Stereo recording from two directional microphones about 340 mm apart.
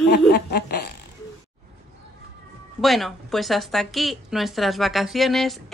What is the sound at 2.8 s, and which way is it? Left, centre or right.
A woman's voice, centre.